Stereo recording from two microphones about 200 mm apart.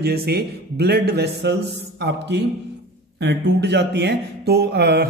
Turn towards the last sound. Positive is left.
turn(degrees=-55)  # may be behind; listen again after turning